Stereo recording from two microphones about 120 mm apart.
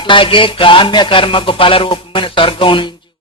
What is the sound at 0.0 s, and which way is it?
Speech, 45° left (ahead or behind).